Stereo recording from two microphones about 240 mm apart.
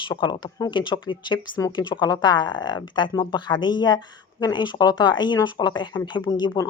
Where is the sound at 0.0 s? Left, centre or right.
Centre.